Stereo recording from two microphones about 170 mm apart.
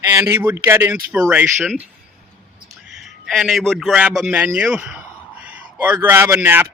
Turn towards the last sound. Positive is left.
turn(degrees=-10)  # may be behind; listen again after turning